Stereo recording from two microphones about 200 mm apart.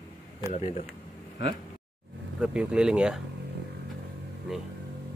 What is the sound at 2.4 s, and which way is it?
Speech, 5° right (ahead or behind).